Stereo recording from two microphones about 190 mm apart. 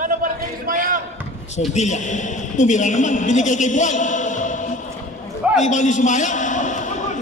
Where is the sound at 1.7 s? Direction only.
40° left (ahead or behind).